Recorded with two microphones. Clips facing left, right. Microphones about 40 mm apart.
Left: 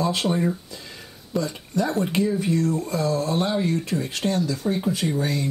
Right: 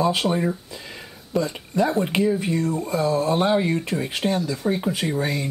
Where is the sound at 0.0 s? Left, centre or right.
Centre.